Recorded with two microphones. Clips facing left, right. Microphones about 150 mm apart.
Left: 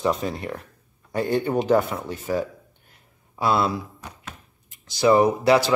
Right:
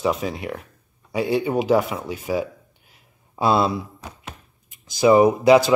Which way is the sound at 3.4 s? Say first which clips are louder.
Right 3 dB; 25° right (ahead or behind).